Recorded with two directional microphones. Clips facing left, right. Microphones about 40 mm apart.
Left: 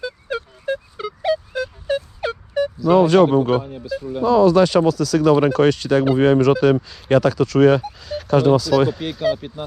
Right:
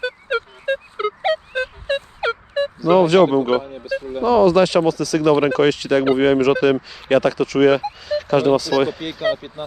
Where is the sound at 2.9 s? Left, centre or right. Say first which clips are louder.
Even; right.